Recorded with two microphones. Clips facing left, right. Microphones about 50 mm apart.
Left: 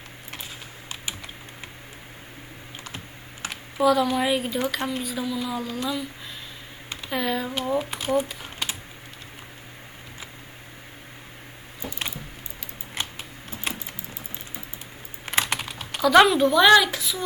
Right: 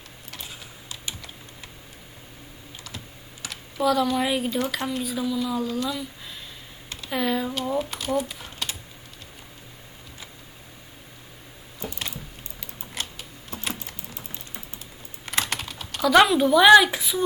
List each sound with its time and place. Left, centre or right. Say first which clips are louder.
3.8 s speech: left 2 dB; centre
4.4 s speech: even; centre
5.0 s speech: right 2 dB; centre
7.1 s a sound: right 1 dB; centre
7.5 s speech: left 1 dB; centre
8.4 s typing: left 2 dB; centre
11.8 s keys jangling: left 1 dB; centre
12.9 s typing: left 2 dB; left
15.3 s typing: left 2 dB; centre
16.0 s speech: left 1 dB; centre; by 17.2 s right